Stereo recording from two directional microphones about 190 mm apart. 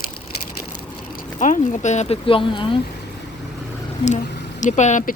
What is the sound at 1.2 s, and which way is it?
A woman's voice, 40° left (ahead or behind).